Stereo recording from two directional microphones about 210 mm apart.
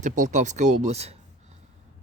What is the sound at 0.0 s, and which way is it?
Speech, 35° right (ahead or behind).